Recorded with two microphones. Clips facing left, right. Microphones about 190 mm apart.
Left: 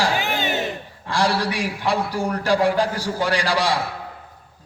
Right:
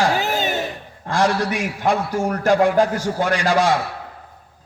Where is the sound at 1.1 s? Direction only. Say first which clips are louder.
Right 2 dB; 35° left (ahead or behind).